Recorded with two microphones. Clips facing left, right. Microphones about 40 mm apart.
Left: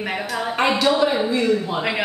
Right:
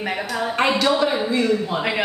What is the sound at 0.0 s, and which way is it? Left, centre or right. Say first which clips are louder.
A woman's voice: right 1 dB; centre.